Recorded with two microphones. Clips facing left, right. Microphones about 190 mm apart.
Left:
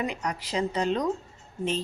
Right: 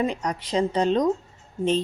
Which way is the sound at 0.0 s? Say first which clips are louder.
Right 5 dB; 35° right (ahead or behind).